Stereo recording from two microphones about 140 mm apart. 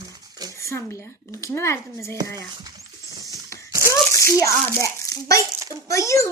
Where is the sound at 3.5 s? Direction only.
20° left (ahead or behind).